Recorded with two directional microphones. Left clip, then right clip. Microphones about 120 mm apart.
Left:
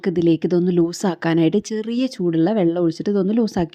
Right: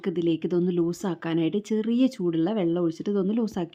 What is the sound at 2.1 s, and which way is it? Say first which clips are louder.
Speech: left 7 dB; 30° left (ahead or behind).